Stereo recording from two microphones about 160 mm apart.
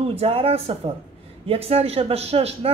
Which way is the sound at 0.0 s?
40° right (ahead or behind).